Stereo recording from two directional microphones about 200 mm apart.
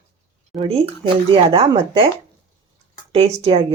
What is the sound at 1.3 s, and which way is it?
Speech, 25° right (ahead or behind).